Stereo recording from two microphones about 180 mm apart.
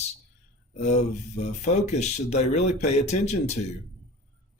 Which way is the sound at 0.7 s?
40° left (ahead or behind).